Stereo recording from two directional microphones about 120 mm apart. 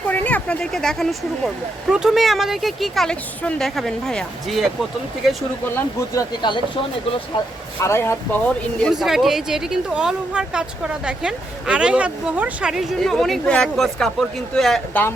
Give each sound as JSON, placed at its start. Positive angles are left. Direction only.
{"t": 0.1, "sound": "a sound", "side_deg": 15}
{"t": 1.9, "sound": "speech", "side_deg": -5}
{"t": 5.6, "sound": "speech", "side_deg": 20}
{"t": 7.3, "sound": "speech", "side_deg": 40}
{"t": 7.8, "sound": "speech", "side_deg": 20}
{"t": 8.9, "sound": "speech", "side_deg": -5}